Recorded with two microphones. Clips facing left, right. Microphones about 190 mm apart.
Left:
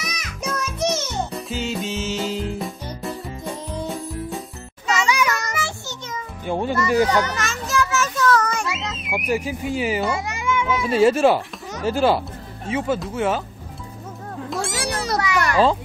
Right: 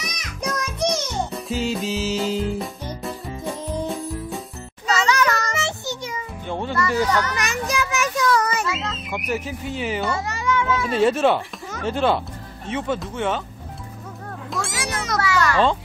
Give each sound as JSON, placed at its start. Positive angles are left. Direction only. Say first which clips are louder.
{"t": 0.0, "sound": "music", "louder": "right 1 dB", "side_deg": 10}
{"t": 5.0, "sound": "children playing", "louder": "right 2 dB", "side_deg": 10}
{"t": 5.5, "sound": "child singing", "louder": "right 2 dB", "side_deg": -20}
{"t": 6.4, "sound": "a sound", "louder": "left 3 dB", "side_deg": 10}
{"t": 7.3, "sound": "a sound", "louder": "left 1 dB", "side_deg": -15}
{"t": 8.6, "sound": "speech", "louder": "right 1 dB", "side_deg": 20}
{"t": 14.5, "sound": "a sound", "louder": "left 2 dB", "side_deg": 0}
{"t": 14.9, "sound": "children playing", "louder": "left 3 dB", "side_deg": 35}
{"t": 15.1, "sound": "children playing", "louder": "right 1 dB", "side_deg": 15}